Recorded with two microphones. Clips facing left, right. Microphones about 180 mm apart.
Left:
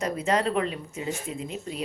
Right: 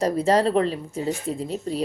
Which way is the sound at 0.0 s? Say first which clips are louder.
Right 6 dB; 35° right (ahead or behind).